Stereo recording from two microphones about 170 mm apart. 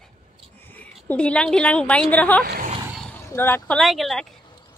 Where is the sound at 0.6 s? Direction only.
10° left (ahead or behind).